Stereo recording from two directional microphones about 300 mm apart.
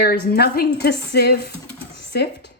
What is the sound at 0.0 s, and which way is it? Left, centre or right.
Speech, left.